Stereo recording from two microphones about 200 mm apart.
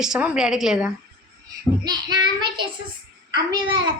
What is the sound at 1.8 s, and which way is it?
Child singing, 20° right (ahead or behind).